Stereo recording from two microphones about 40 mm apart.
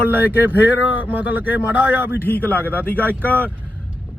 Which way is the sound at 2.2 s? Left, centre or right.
Left.